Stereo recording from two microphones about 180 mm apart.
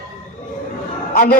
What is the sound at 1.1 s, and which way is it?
Speech, 50° left (ahead or behind).